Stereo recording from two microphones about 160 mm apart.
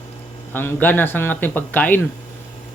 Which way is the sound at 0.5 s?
15° left (ahead or behind).